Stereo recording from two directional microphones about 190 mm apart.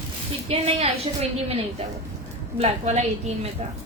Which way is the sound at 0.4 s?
30° right (ahead or behind).